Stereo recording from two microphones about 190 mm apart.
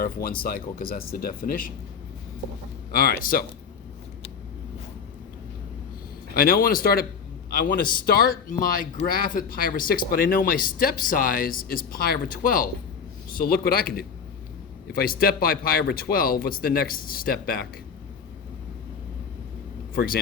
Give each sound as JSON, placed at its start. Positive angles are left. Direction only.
{"t": 0.0, "sound": "speech", "side_deg": 50}
{"t": 2.9, "sound": "speech", "side_deg": 50}
{"t": 6.3, "sound": "speech", "side_deg": 50}